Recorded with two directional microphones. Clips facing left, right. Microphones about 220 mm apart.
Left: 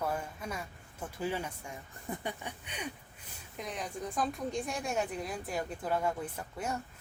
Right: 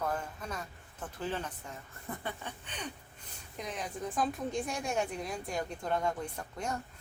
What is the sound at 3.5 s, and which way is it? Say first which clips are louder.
A woman's voice: even; centre (ahead or behind).